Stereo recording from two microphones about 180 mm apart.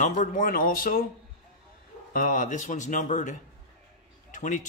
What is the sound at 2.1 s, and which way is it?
A man's voice, 50° left (ahead or behind).